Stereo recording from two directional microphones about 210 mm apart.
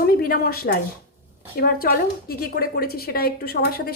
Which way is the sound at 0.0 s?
45° left (ahead or behind).